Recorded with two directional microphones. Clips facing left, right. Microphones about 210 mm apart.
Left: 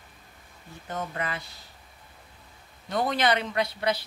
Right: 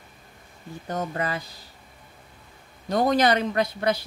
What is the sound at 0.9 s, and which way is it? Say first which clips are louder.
Speech: right 4 dB; 40° right (ahead or behind).